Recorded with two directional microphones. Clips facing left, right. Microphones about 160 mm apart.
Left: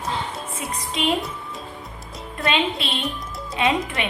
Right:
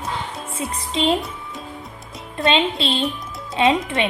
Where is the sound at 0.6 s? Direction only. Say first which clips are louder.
Right 4 dB; 25° right (ahead or behind).